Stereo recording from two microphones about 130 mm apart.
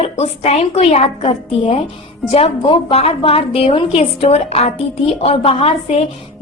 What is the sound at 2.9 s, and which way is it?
A woman's voice, 45° left (ahead or behind).